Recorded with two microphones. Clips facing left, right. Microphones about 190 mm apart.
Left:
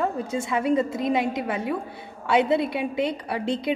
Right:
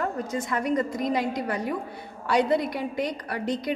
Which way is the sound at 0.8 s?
25° left (ahead or behind).